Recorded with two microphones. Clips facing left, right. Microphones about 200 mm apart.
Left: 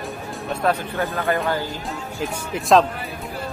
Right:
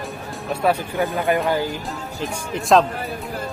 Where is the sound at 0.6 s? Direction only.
15° right (ahead or behind).